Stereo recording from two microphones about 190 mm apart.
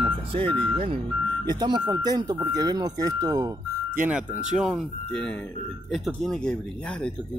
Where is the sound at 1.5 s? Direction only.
25° right (ahead or behind).